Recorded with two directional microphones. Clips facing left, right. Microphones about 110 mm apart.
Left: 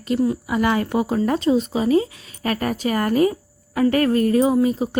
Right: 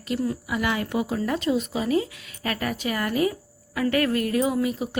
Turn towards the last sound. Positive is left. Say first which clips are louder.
# left 6 dB
turn(degrees=35)  # may be behind; listen again after turning